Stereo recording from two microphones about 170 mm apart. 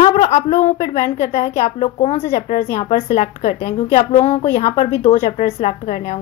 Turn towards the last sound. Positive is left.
turn(degrees=40)  # may be behind; listen again after turning